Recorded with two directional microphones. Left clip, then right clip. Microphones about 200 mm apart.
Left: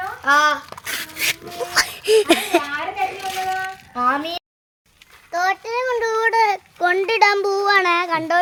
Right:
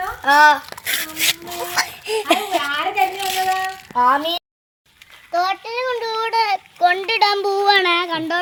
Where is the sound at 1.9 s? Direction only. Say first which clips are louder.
Left 6 dB; 60° left (ahead or behind).